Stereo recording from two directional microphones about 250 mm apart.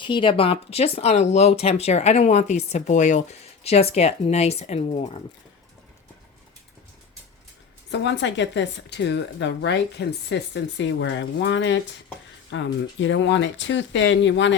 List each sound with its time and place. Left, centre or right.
0.0 s speech: centre
7.9 s speech: left